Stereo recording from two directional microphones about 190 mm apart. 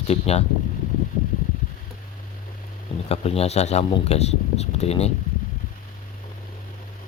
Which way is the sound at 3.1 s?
35° left (ahead or behind).